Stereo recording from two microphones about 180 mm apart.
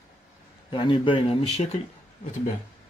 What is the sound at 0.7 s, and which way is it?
Speech, 25° left (ahead or behind).